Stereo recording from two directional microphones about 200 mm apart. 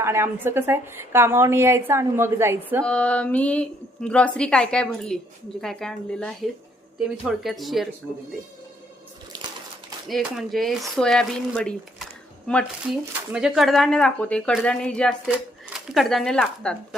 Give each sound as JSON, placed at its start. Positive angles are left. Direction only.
{"t": 0.0, "sound": "a woman's voice", "side_deg": -10}
{"t": 2.8, "sound": "a woman's voice", "side_deg": 5}
{"t": 9.3, "sound": "a sound", "side_deg": -20}
{"t": 10.1, "sound": "a woman's voice", "side_deg": 0}